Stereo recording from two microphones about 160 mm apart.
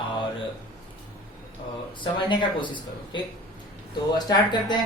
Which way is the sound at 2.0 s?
30° left (ahead or behind).